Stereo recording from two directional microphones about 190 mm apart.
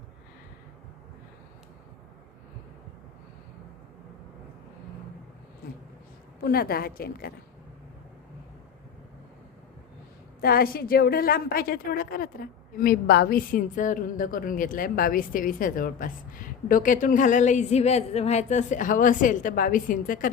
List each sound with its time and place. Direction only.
6.4 s a woman's voice: 55° left (ahead or behind)
10.4 s a woman's voice: 50° left (ahead or behind)